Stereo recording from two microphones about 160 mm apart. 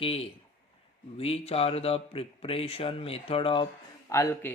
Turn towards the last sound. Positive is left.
turn(degrees=20)  # may be behind; listen again after turning